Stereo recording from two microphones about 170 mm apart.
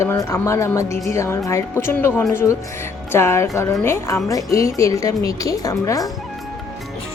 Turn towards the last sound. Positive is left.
turn(degrees=20)  # may be behind; listen again after turning